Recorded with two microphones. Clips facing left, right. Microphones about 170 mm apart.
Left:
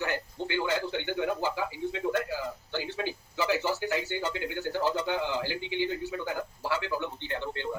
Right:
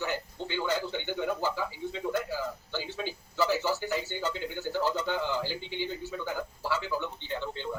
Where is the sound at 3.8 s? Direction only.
55° left (ahead or behind).